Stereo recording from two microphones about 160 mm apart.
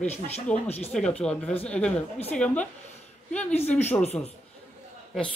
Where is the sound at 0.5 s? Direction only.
5° left (ahead or behind).